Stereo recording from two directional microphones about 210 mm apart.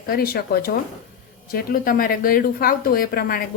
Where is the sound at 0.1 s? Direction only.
45° left (ahead or behind).